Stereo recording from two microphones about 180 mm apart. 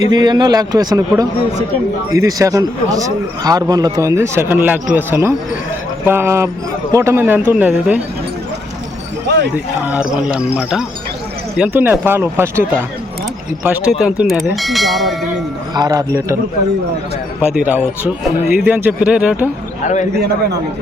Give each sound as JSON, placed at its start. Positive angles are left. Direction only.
{"t": 0.1, "sound": "a man's voice", "side_deg": -25}
{"t": 9.2, "sound": "speech", "side_deg": -70}
{"t": 9.8, "sound": "speech", "side_deg": -5}
{"t": 14.0, "sound": "speech", "side_deg": 0}
{"t": 15.7, "sound": "a man's voice", "side_deg": -20}
{"t": 17.4, "sound": "speech", "side_deg": -10}
{"t": 20.1, "sound": "a man's voice", "side_deg": -65}